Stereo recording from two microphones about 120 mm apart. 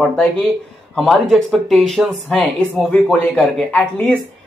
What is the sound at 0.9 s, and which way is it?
Speech, centre (ahead or behind).